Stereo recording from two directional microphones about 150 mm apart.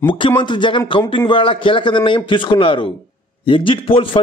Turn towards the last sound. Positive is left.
turn(degrees=35)  # may be behind; listen again after turning